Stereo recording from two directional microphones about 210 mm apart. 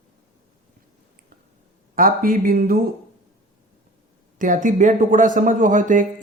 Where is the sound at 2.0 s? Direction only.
40° right (ahead or behind).